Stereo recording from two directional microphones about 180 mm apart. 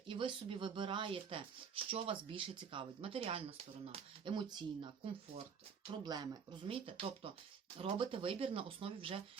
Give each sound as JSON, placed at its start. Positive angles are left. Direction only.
{"t": 0.1, "sound": "speech", "side_deg": -30}